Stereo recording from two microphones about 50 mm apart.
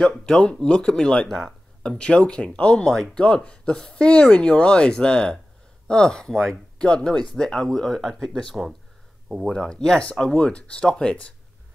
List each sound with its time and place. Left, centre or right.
0.0 s speech: centre
2.8 s speech: centre
9.5 s speech: centre